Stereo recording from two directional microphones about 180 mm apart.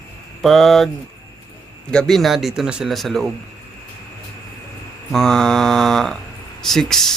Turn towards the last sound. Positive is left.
turn(degrees=0)  # may be behind; listen again after turning